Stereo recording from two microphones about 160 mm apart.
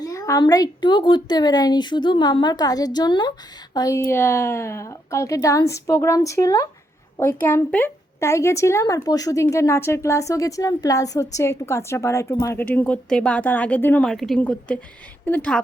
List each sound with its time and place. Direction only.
0.0 s a woman's voice: 20° left (ahead or behind)